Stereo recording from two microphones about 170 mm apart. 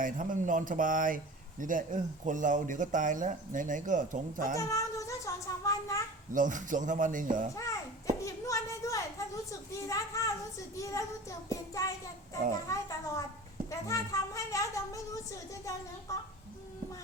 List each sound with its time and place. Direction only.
0.0 s speech: 50° right (ahead or behind)
4.5 s speech: 20° left (ahead or behind)
6.3 s speech: 50° right (ahead or behind)
7.5 s a child's voice: 20° left (ahead or behind)
8.2 s a sound: 20° left (ahead or behind)
10.8 s speech: 20° left (ahead or behind)